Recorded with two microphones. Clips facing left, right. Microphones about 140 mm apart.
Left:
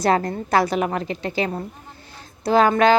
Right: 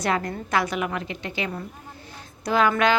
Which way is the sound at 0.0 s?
35° left (ahead or behind).